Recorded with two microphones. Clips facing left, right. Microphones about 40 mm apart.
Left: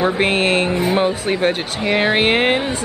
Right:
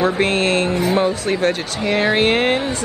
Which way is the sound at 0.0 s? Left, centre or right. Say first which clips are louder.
Even; centre.